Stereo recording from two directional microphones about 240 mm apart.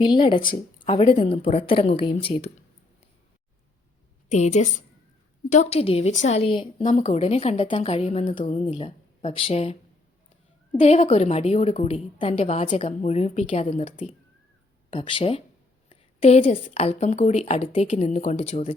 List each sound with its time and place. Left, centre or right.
0.0 s a woman's voice: centre
4.3 s a woman's voice: left
10.8 s a woman's voice: left
14.9 s a woman's voice: left